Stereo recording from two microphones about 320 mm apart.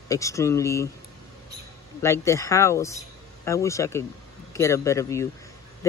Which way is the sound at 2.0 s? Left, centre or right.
Centre.